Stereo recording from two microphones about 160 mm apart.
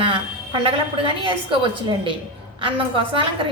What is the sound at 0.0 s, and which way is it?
A woman's voice, 35° right (ahead or behind).